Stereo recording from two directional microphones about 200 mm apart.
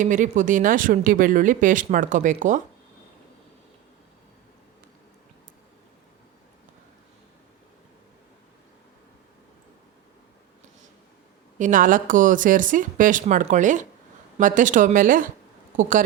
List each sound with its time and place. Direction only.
0.0 s speech: 40° right (ahead or behind)
11.5 s speech: 40° right (ahead or behind)